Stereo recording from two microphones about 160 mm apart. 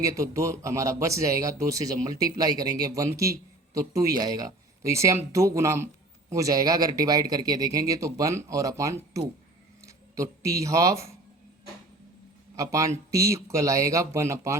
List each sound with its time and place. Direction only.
0.0 s speech: 20° right (ahead or behind)
12.5 s speech: 20° right (ahead or behind)